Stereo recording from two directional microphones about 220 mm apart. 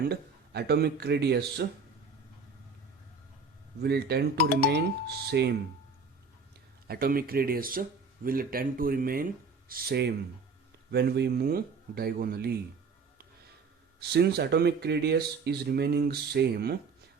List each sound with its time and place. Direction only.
0.1 s speech: 45° right (ahead or behind)
3.8 s speech: 45° right (ahead or behind)
6.8 s speech: 45° right (ahead or behind)
14.0 s speech: 45° right (ahead or behind)